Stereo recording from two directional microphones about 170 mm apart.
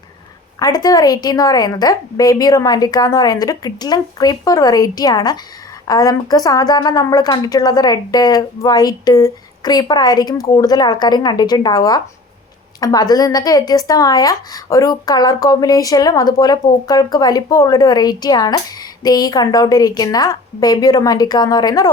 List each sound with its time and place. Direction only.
0.6 s a woman's voice: 20° left (ahead or behind)